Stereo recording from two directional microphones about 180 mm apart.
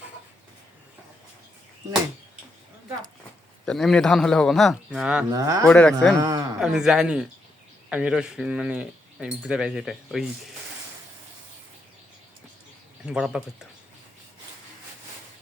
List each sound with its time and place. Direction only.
3.7 s speech: centre (ahead or behind)
5.3 s speech: 20° right (ahead or behind)
5.6 s speech: 5° left (ahead or behind)
6.1 s speech: 25° right (ahead or behind)
6.6 s speech: 5° right (ahead or behind)
13.1 s speech: 5° right (ahead or behind)